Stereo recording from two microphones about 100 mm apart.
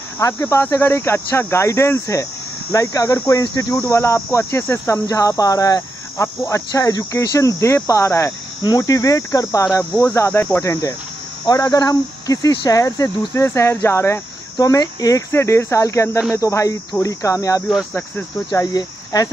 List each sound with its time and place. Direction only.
0.2 s speech: 25° left (ahead or behind)
17.9 s speech: 20° left (ahead or behind)
18.7 s speech: 35° left (ahead or behind)